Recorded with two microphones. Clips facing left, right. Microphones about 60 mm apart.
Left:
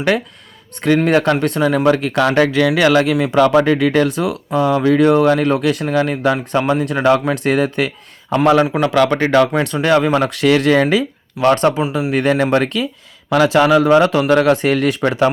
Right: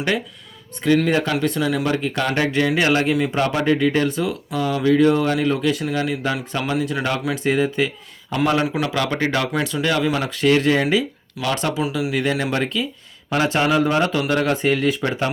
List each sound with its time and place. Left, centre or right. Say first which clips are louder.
1.0 s speech: left 5 dB; left
1.8 s speech: left 7 dB; left
9.6 s speech: left 6 dB; left
11.3 s speech: left 10 dB; left
11.8 s speech: left 4 dB; left
12.1 s speech: left 10 dB; left
13.3 s speech: left 7 dB; left